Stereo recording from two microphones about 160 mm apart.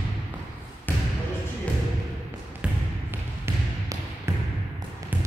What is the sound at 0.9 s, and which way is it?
Basketball bounce, 10° left (ahead or behind).